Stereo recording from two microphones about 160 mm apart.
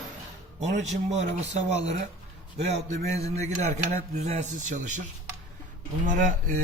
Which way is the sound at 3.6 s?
50° right (ahead or behind).